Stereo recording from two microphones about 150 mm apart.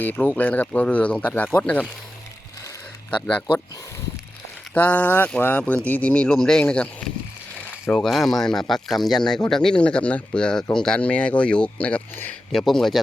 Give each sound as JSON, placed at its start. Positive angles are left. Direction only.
{"t": 0.0, "sound": "speech", "side_deg": 10}
{"t": 3.1, "sound": "speech", "side_deg": 10}
{"t": 4.7, "sound": "speech", "side_deg": 10}